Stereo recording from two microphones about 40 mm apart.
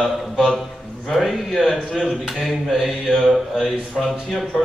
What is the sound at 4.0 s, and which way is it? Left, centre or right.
Speech, centre.